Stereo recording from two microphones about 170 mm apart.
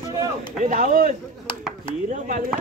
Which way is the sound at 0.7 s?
50° right (ahead or behind).